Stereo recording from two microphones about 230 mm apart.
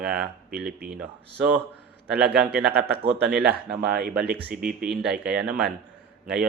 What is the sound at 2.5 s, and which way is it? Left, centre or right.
Speech, right.